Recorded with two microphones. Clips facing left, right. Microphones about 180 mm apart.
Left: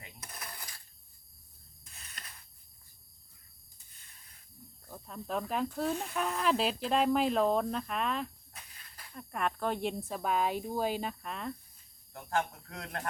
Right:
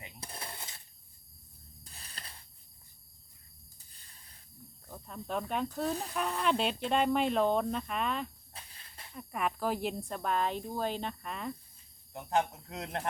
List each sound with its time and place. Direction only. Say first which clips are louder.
0.0 s cutlery: right 3 dB; 30° right (ahead or behind)
1.8 s a sound: right 2 dB; 35° right (ahead or behind)
4.9 s speech: even; centre (ahead or behind)
8.5 s snake: right 2 dB; 30° right (ahead or behind)
9.1 s speech: even; 5° right (ahead or behind)
12.1 s a man's voice: right 2 dB; 20° right (ahead or behind)